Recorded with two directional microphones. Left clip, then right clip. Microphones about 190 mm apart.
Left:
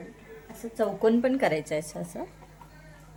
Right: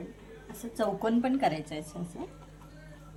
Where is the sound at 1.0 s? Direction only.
45° left (ahead or behind); by 1.8 s 65° left (ahead or behind).